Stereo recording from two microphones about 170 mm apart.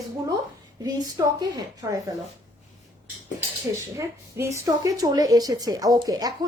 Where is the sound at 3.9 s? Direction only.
15° right (ahead or behind).